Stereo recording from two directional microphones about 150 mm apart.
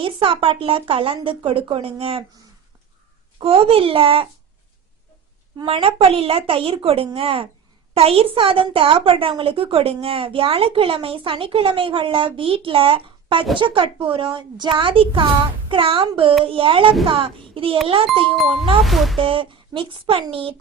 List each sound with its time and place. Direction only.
0.0 s a woman's voice: 35° right (ahead or behind)
3.4 s a woman's voice: 35° right (ahead or behind)
5.6 s a woman's voice: 40° right (ahead or behind)
18.9 s speech: centre (ahead or behind)
19.2 s a woman's voice: 35° right (ahead or behind)